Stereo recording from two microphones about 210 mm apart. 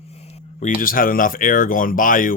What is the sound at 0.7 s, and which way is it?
Speech, 40° left (ahead or behind).